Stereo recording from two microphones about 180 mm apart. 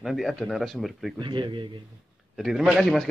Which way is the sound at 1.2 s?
25° right (ahead or behind).